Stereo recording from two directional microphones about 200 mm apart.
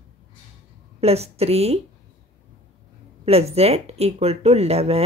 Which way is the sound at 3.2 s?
30° right (ahead or behind).